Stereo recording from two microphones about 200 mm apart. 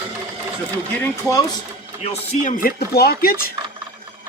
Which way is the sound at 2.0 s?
30° left (ahead or behind).